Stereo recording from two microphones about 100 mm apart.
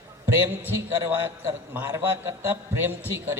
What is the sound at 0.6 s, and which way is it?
A man's voice, 20° right (ahead or behind).